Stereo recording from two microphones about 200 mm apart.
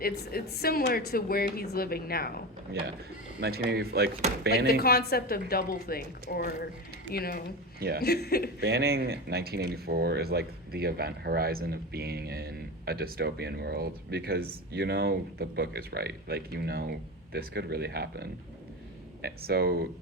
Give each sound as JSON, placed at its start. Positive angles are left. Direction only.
{"t": 0.0, "sound": "a woman's voice", "side_deg": 50}
{"t": 3.4, "sound": "speech", "side_deg": -55}
{"t": 4.6, "sound": "a woman's voice", "side_deg": 50}
{"t": 7.8, "sound": "a man's voice", "side_deg": -50}
{"t": 8.0, "sound": "a woman's voice", "side_deg": 50}
{"t": 8.6, "sound": "speech", "side_deg": -55}